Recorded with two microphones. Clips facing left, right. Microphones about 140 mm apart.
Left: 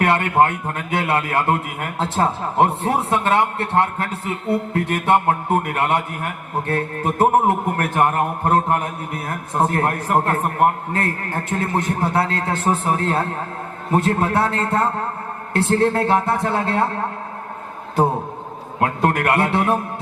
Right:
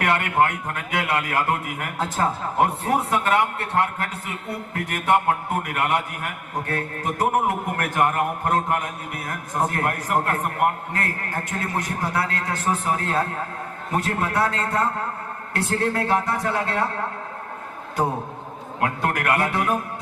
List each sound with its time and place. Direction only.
0.0 s a man's voice: 25° left (ahead or behind)
18.8 s a man's voice: 25° left (ahead or behind)